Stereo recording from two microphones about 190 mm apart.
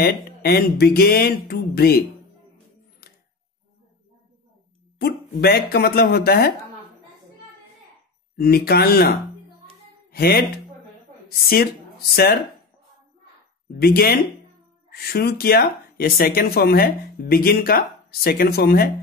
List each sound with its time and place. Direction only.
0.0 s speech: 55° left (ahead or behind)
3.0 s a sound: 55° left (ahead or behind)
5.4 s speech: 55° left (ahead or behind)
8.4 s speech: 55° left (ahead or behind)
10.1 s speech: 55° left (ahead or behind)
13.7 s speech: 55° left (ahead or behind)